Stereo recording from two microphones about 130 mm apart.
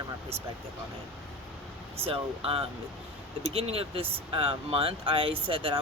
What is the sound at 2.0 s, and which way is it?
Speech, 45° right (ahead or behind).